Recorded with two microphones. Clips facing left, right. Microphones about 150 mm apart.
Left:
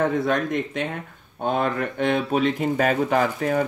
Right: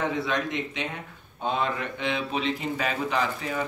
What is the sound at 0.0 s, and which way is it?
Speech, 50° left (ahead or behind).